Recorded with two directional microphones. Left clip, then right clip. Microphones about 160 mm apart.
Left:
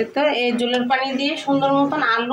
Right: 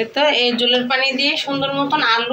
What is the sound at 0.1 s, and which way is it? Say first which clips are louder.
A woman's voice: right 6 dB; 30° left (ahead or behind).